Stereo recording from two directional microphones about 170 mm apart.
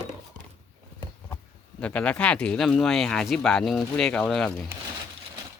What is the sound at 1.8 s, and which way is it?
Speech, 5° left (ahead or behind).